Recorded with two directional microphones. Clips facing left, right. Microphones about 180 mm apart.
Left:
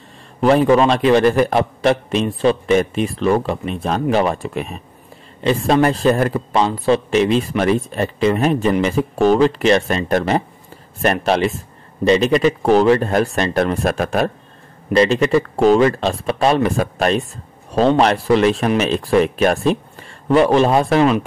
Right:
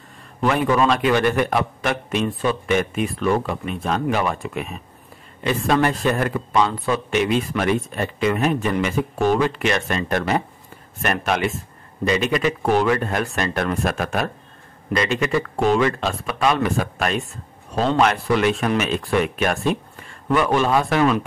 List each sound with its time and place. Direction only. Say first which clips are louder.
0.4 s a man's voice: left 6 dB; 30° left (ahead or behind)